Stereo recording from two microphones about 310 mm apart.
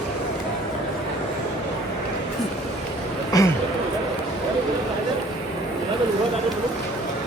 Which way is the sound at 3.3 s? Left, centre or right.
Centre.